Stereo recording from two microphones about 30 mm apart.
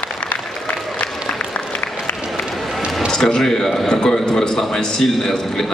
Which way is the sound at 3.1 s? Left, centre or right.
Centre.